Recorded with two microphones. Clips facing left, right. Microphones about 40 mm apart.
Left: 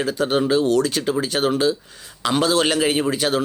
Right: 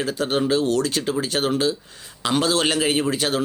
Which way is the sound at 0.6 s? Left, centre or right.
Right.